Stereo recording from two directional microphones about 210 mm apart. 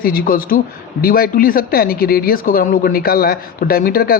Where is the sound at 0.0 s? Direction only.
45° left (ahead or behind).